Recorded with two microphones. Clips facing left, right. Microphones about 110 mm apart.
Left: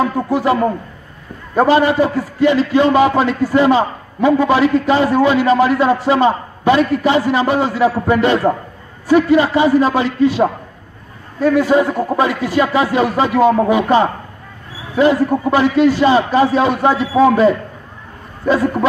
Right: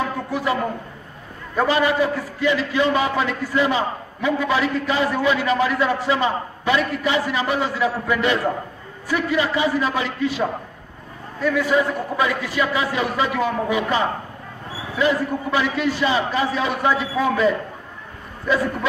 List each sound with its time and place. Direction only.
0.3 s a man's voice: 35° left (ahead or behind)
11.4 s a man's voice: 35° left (ahead or behind)